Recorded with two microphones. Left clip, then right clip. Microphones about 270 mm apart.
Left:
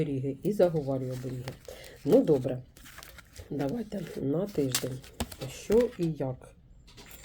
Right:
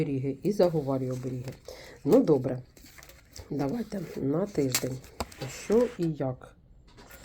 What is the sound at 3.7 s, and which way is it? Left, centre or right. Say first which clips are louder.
Speech: right 1 dB; right.